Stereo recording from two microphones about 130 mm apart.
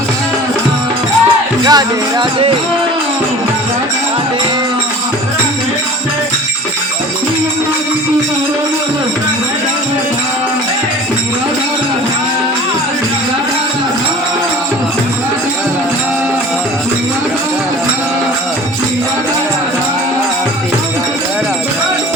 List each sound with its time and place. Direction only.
1.6 s speech: 30° right (ahead or behind)